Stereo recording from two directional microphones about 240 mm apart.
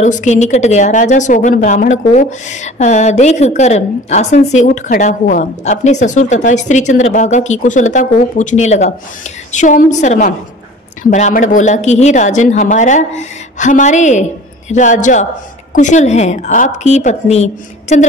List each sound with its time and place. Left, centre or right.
0.0 s a woman's voice: left